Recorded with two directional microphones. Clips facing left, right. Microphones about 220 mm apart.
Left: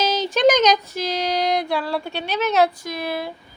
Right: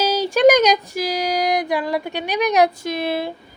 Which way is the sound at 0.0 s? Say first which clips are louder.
Right 3 dB; 10° right (ahead or behind).